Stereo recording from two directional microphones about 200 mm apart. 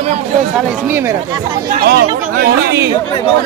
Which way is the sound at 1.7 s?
50° right (ahead or behind).